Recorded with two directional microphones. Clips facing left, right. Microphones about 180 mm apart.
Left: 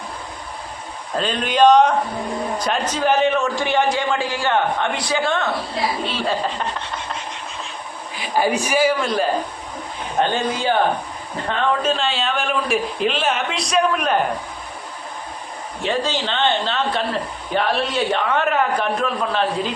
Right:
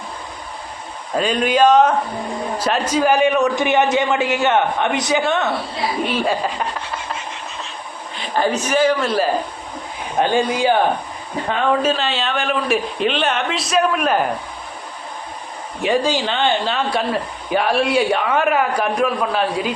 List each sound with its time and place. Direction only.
1.1 s a man's voice: 10° right (ahead or behind)
8.1 s a man's voice: 10° left (ahead or behind)
10.2 s a man's voice: 15° right (ahead or behind)
15.8 s a man's voice: 15° right (ahead or behind)